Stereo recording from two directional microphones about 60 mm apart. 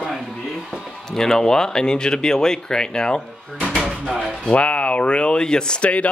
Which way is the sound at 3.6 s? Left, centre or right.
Centre.